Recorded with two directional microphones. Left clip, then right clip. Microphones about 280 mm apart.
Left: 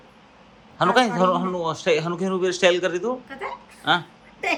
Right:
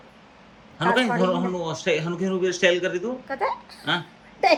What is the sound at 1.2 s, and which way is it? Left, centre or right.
Speech, centre.